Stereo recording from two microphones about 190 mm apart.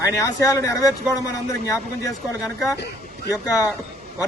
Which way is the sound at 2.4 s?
Centre (ahead or behind).